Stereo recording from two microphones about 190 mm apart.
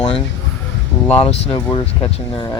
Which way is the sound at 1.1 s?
30° left (ahead or behind).